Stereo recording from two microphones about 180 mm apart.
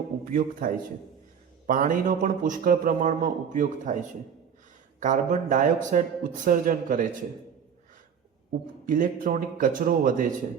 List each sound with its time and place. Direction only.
0.3 s a man's voice: 50° right (ahead or behind)
4.9 s a man's voice: 45° right (ahead or behind)
8.9 s a man's voice: 45° right (ahead or behind)